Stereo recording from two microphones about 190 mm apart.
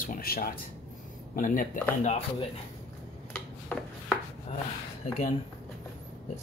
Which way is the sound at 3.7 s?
5° left (ahead or behind).